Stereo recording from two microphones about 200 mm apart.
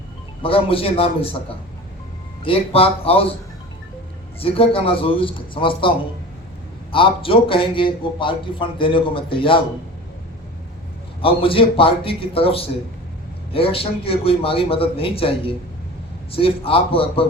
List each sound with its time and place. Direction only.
0.4 s a man's voice: 25° left (ahead or behind)
4.4 s a man's voice: 30° left (ahead or behind)
6.9 s a man's voice: 25° left (ahead or behind)
11.2 s a man's voice: 25° left (ahead or behind)